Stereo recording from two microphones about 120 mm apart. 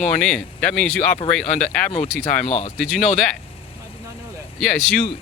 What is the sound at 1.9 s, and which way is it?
Speech, 60° left (ahead or behind).